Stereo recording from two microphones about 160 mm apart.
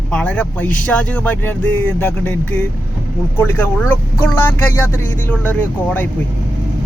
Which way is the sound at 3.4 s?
10° left (ahead or behind).